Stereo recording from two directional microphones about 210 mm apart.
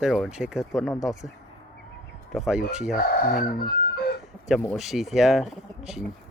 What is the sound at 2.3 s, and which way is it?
Speech, 5° right (ahead or behind).